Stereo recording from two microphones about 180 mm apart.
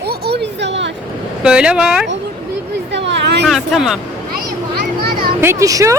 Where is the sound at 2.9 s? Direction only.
75° right (ahead or behind).